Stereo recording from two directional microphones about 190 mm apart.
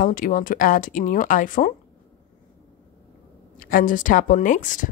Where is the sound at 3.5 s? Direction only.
45° left (ahead or behind).